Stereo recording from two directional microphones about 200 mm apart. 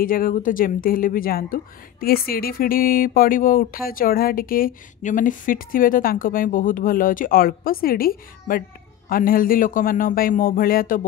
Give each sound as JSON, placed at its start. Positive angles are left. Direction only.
{"t": 0.0, "sound": "speech", "side_deg": 45}